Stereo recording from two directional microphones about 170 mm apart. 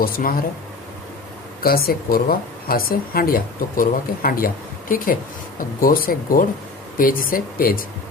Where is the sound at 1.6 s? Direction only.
60° left (ahead or behind).